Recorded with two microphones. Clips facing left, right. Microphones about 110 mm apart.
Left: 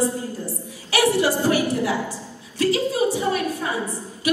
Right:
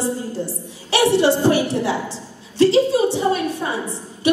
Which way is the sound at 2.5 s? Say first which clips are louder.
Right 6 dB; 30° right (ahead or behind).